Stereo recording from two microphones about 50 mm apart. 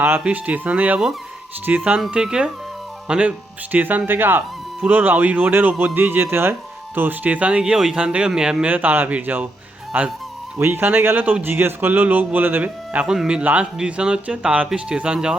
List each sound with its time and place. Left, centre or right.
0.3 s speech: right
2.2 s speech: centre
3.7 s speech: right
7.6 s speech: centre
8.6 s speech: right
12.6 s speech: right